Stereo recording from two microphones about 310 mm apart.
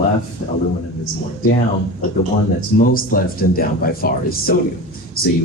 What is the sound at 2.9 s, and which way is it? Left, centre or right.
Speech, left.